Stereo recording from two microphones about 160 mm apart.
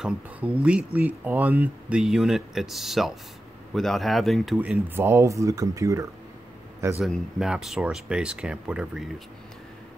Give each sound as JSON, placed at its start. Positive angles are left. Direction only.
{"t": 0.0, "sound": "speech", "side_deg": -10}
{"t": 4.6, "sound": "speech", "side_deg": -10}
{"t": 7.0, "sound": "speech", "side_deg": -5}